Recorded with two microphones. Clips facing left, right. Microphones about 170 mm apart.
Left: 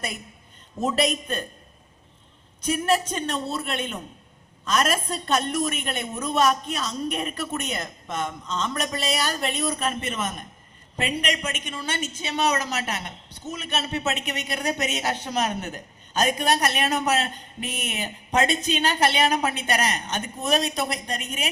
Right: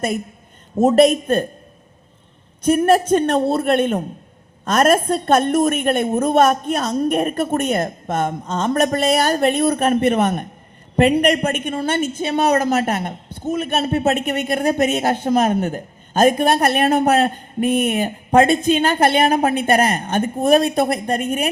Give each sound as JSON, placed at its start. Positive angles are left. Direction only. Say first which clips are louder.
{"t": 0.8, "sound": "a woman's voice", "louder": "right 12 dB", "side_deg": -50}
{"t": 2.6, "sound": "a woman's voice", "louder": "right 9 dB", "side_deg": -55}